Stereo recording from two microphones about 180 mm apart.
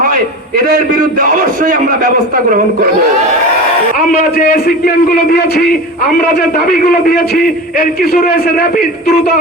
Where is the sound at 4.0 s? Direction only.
55° left (ahead or behind).